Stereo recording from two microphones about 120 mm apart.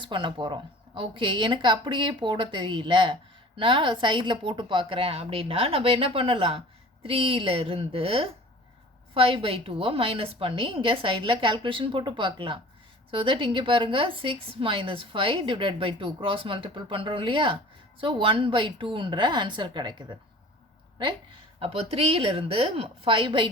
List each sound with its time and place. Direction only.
0.0 s a woman's voice: 40° right (ahead or behind)
21.6 s a woman's voice: 55° right (ahead or behind)